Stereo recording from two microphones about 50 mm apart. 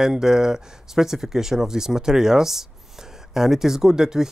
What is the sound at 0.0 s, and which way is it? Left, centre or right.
Speech, centre.